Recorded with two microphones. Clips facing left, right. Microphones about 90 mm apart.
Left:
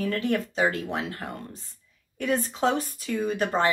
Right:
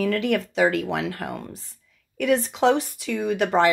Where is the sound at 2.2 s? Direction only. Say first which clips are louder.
Right 5 dB; 85° right; by 3.6 s 70° right (ahead or behind).